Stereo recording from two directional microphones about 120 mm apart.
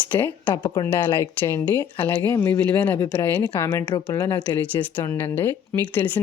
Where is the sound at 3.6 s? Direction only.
35° left (ahead or behind).